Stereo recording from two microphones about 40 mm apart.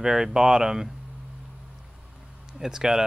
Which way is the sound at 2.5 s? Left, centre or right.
Centre.